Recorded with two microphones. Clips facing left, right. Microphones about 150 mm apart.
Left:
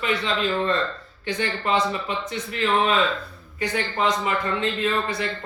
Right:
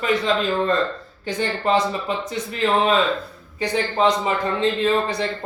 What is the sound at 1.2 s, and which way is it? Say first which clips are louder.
A man's voice: right 3 dB; 40° right (ahead or behind).